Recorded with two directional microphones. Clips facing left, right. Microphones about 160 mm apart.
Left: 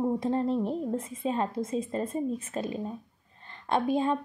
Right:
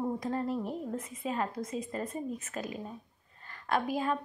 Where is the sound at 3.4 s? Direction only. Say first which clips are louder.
Left 3 dB; 25° left (ahead or behind).